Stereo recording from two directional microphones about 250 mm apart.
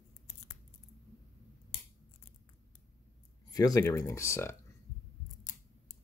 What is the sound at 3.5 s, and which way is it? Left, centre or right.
Speech, centre.